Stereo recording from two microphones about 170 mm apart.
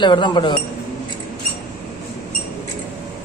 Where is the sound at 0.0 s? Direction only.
25° left (ahead or behind).